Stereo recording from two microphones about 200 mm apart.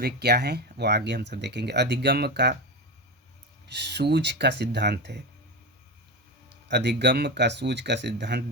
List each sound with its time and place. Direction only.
0.0 s speech: 55° right (ahead or behind)
3.7 s speech: 55° right (ahead or behind)
6.5 s speech: 55° right (ahead or behind)